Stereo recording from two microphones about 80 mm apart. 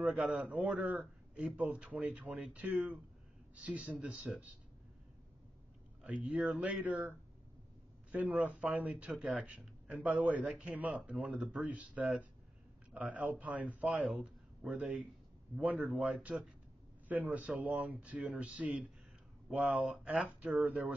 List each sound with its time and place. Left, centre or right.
0.0 s a man's voice: centre
6.0 s a man's voice: centre
9.1 s a man's voice: centre
14.1 s a sound: centre
15.5 s a man's voice: centre